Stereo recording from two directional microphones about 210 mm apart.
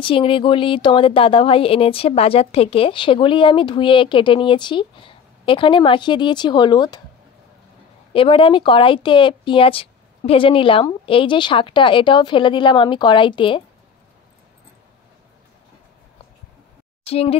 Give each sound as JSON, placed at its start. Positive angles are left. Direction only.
{"t": 0.0, "sound": "speech", "side_deg": 25}
{"t": 8.1, "sound": "speech", "side_deg": 25}
{"t": 17.0, "sound": "speech", "side_deg": 30}